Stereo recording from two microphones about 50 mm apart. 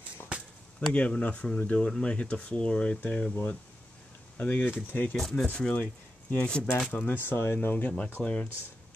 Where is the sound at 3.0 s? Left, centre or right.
Left.